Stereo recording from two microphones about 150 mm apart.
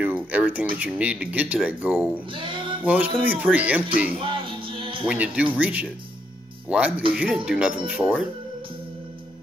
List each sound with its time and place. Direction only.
0.0 s a sound: 10° right (ahead or behind)
0.7 s speech: 10° right (ahead or behind)
2.3 s speech: 35° right (ahead or behind)
2.8 s speech: 10° right (ahead or behind)
4.2 s music: 35° right (ahead or behind)
5.0 s speech: 10° right (ahead or behind)